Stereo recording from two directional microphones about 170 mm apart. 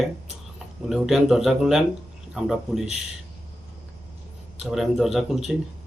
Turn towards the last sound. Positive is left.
turn(degrees=0)  # may be behind; listen again after turning